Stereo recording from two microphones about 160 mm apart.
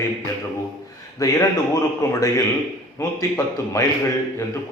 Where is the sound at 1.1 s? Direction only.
20° left (ahead or behind).